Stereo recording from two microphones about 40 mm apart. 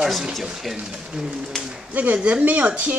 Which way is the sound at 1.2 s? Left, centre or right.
Centre.